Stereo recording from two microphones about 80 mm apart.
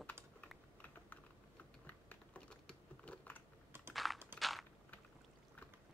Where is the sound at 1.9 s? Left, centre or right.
Centre.